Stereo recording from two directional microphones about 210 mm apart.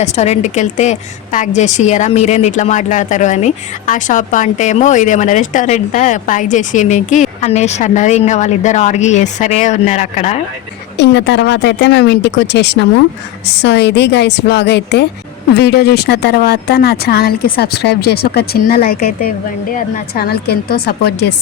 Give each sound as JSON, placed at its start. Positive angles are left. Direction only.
{"t": 0.0, "sound": "a woman's voice", "side_deg": 30}
{"t": 10.9, "sound": "speech", "side_deg": 55}